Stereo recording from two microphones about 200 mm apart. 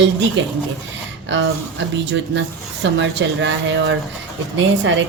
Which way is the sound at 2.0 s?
65° right (ahead or behind).